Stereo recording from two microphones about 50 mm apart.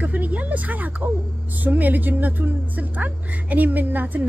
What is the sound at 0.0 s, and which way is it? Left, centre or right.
Speech, right.